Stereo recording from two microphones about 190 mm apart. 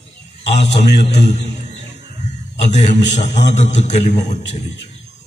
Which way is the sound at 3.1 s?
35° left (ahead or behind).